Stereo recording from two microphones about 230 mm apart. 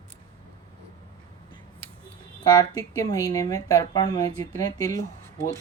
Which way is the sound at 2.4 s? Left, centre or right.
Centre.